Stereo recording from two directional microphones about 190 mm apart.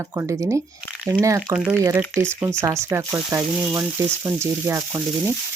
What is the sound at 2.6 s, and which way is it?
Speech, 15° right (ahead or behind).